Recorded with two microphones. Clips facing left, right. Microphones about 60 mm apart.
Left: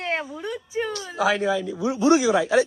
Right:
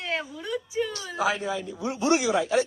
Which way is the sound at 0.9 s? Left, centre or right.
Left.